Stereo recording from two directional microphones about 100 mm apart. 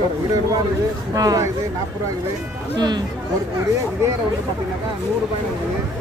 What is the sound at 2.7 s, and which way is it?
Speech, 45° right (ahead or behind).